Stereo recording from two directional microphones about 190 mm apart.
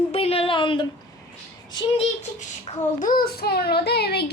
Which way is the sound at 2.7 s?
40° left (ahead or behind).